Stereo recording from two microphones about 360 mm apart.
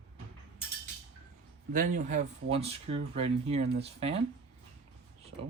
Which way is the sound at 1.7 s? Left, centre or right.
Right.